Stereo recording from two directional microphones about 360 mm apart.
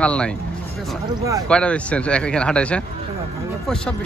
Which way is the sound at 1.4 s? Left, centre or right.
Centre.